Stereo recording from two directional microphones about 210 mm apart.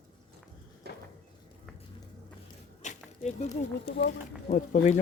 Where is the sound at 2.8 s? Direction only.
35° left (ahead or behind).